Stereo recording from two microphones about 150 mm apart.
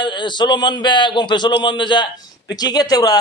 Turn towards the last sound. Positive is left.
turn(degrees=25)  # may be behind; listen again after turning